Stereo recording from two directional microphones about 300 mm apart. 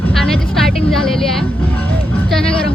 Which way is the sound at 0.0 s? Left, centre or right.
Centre.